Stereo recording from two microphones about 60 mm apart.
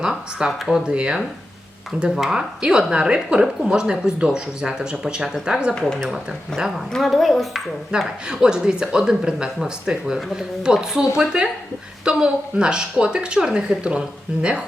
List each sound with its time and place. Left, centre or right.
0.0 s speech: centre
2.1 s speech: centre
5.8 s speech: centre
7.9 s speech: centre